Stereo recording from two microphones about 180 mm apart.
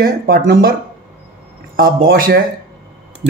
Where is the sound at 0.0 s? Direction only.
55° right (ahead or behind).